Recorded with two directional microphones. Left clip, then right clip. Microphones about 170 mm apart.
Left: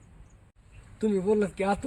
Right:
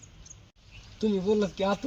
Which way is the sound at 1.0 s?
5° left (ahead or behind).